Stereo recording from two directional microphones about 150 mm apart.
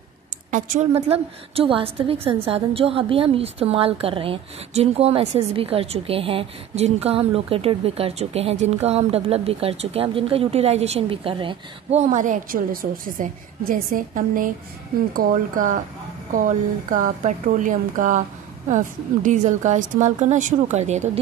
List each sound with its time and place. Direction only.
0.5 s a woman's voice: 60° right (ahead or behind)
0.9 s a woman's voice: 45° right (ahead or behind)
12.0 s a woman's voice: 55° right (ahead or behind)